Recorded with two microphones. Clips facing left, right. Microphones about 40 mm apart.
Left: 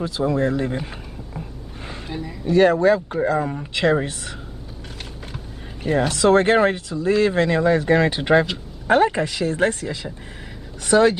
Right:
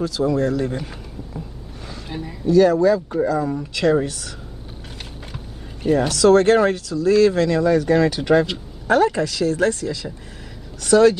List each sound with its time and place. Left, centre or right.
0.0 s speech: left
2.0 s speech: centre
2.5 s speech: left
5.9 s speech: left